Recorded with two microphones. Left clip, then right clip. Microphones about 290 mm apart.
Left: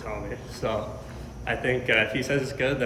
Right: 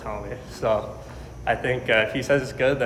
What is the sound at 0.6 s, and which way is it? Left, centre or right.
A man's voice, centre.